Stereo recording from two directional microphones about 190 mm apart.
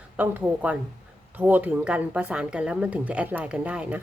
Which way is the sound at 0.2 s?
10° right (ahead or behind).